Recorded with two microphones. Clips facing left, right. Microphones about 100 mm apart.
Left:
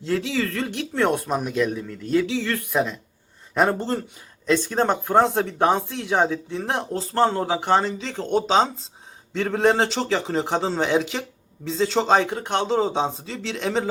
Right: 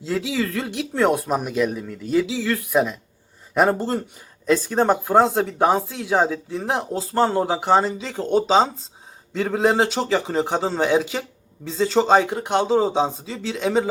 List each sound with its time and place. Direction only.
0.0 s a man's voice: 5° right (ahead or behind)